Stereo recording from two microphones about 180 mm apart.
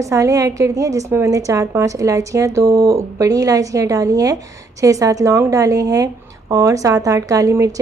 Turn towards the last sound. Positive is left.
turn(degrees=-15)  # may be behind; listen again after turning